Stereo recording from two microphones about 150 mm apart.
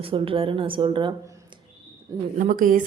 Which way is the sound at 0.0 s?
35° right (ahead or behind).